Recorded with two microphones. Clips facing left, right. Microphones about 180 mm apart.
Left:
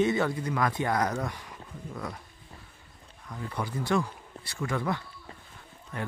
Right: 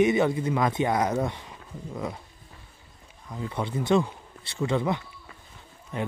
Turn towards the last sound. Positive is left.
turn(degrees=-20)  # may be behind; listen again after turning